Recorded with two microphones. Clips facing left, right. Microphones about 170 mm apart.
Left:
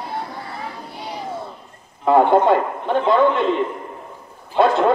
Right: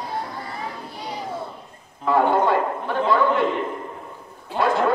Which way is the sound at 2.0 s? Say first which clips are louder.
Left 5 dB; 20° left (ahead or behind).